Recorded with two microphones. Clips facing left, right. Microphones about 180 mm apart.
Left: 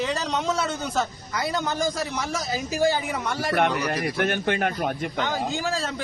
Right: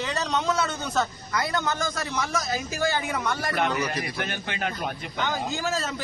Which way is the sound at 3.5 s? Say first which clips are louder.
Left 5 dB; 60° left (ahead or behind).